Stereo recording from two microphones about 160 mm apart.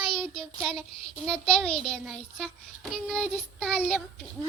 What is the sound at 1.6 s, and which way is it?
Speech, 40° left (ahead or behind).